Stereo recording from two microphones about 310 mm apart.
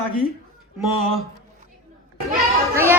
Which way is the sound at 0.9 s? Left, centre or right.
Centre.